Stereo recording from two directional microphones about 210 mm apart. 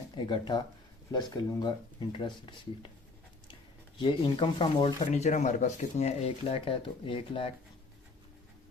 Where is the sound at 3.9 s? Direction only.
25° left (ahead or behind).